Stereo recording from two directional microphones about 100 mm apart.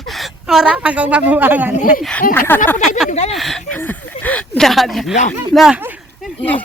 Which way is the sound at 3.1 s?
90° left.